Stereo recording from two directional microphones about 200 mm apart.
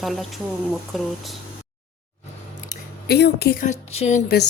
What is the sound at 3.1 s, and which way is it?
Speech, 55° left (ahead or behind).